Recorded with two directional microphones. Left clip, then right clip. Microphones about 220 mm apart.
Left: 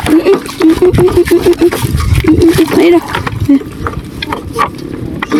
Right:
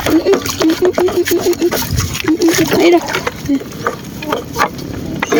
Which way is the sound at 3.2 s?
15° left (ahead or behind).